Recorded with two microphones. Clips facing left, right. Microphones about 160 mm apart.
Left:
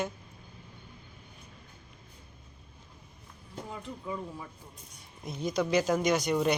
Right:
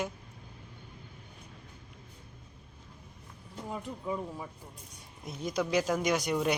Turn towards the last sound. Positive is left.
turn(degrees=-5)  # may be behind; listen again after turning